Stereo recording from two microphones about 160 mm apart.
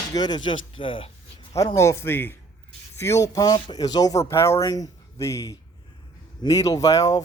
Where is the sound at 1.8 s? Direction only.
15° left (ahead or behind).